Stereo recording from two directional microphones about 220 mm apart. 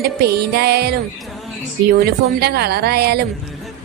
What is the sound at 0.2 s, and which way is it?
Speech, 45° right (ahead or behind).